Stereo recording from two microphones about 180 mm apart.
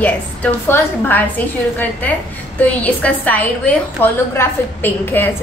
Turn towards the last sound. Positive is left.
turn(degrees=10)  # may be behind; listen again after turning